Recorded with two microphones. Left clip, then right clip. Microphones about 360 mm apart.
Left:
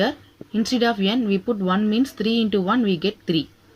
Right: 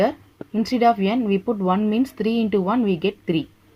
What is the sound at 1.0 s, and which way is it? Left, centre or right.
Speech, right.